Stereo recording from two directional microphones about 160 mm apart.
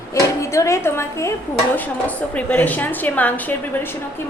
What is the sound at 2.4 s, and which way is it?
A woman's voice, 10° left (ahead or behind).